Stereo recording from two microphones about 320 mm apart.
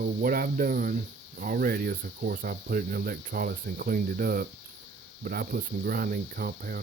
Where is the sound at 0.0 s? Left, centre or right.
Right.